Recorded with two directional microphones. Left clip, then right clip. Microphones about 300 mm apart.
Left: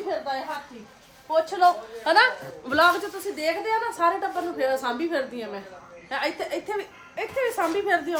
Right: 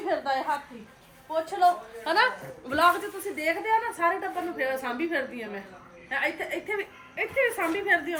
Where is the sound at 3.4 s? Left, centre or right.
Centre.